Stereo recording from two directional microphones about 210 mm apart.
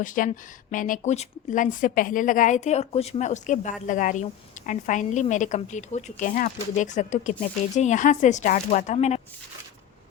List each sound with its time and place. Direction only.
0.0 s speech: 40° left (ahead or behind)